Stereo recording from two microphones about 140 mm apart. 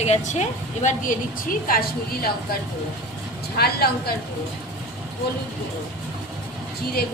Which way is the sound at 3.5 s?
90° left.